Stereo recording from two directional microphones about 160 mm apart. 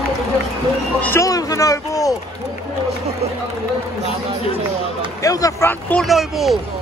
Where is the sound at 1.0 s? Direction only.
15° left (ahead or behind).